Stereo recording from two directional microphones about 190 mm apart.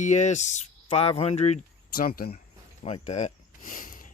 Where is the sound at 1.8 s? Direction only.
50° left (ahead or behind).